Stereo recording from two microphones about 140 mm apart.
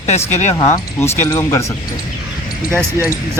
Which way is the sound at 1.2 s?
20° left (ahead or behind).